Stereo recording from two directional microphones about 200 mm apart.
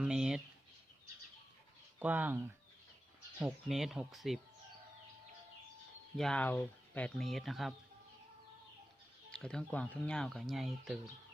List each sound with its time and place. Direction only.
0.0 s a sound: 5° right (ahead or behind)
2.0 s speech: 10° right (ahead or behind)
6.1 s speech: 5° left (ahead or behind)
9.3 s speech: 5° left (ahead or behind)